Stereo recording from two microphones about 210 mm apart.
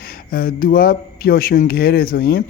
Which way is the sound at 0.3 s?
40° left (ahead or behind).